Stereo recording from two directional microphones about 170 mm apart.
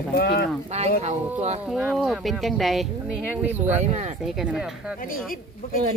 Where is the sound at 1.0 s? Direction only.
40° right (ahead or behind).